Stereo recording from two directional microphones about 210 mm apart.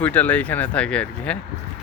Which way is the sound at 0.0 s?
5° left (ahead or behind).